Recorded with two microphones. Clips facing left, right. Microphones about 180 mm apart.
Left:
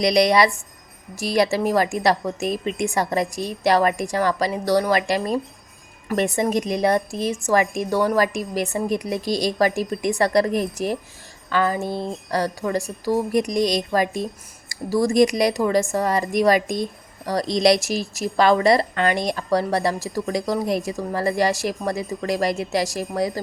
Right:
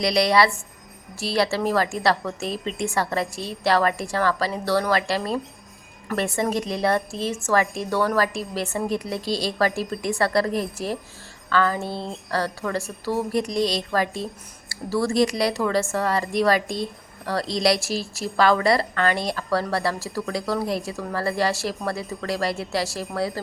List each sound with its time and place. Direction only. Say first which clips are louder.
0.0 s a woman's voice: left 3 dB; 20° left (ahead or behind)